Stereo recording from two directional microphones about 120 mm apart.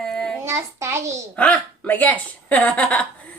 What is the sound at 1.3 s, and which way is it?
Speech, 10° left (ahead or behind).